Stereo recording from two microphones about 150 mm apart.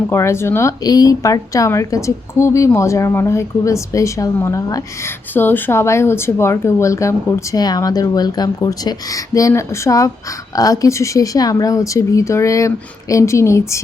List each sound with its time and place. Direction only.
0.1 s speech: 15° left (ahead or behind)